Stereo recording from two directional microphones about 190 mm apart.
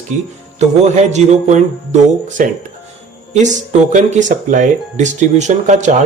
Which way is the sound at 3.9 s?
40° right (ahead or behind).